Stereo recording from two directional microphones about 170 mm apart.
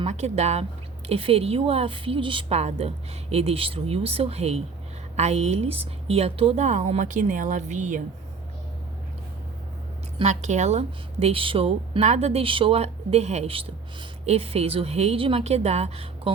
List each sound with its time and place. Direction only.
0.0 s a woman's voice: 40° right (ahead or behind)
10.2 s a woman's voice: 45° right (ahead or behind)